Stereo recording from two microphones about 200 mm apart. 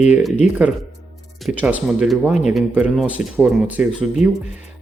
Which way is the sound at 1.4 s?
5° right (ahead or behind).